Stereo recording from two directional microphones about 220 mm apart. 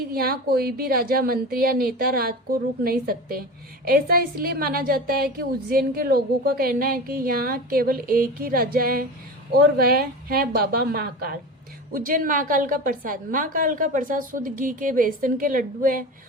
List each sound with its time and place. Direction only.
0.1 s a woman's voice: 45° right (ahead or behind)